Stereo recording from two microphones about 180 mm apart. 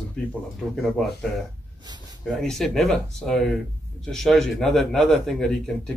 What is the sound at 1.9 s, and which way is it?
Speech, 20° right (ahead or behind).